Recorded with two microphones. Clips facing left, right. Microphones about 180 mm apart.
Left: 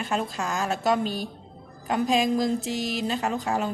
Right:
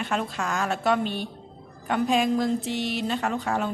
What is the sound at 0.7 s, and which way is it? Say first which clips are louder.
Speech: left 1 dB; 40° left (ahead or behind).